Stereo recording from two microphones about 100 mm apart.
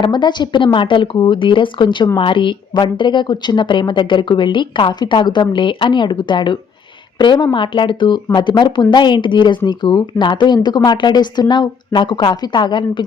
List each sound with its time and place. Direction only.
0.0 s speech: 50° left (ahead or behind)